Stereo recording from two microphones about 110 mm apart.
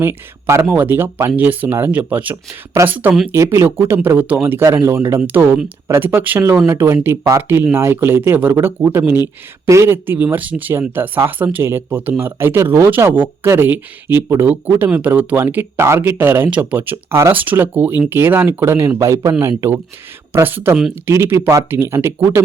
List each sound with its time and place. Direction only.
0.0 s speech: 25° right (ahead or behind)
2.3 s speech: 30° right (ahead or behind)